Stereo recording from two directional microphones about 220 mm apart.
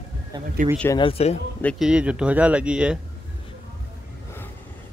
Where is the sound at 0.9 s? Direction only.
25° left (ahead or behind).